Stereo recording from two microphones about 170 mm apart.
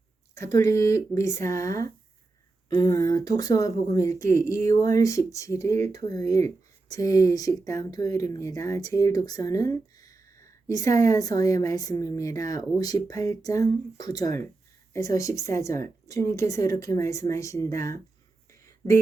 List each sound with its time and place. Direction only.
0.3 s speech: 15° left (ahead or behind)